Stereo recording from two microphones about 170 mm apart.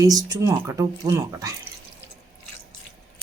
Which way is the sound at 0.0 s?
20° right (ahead or behind).